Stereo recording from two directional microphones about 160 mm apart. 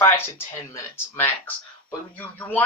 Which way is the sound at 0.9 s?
15° left (ahead or behind).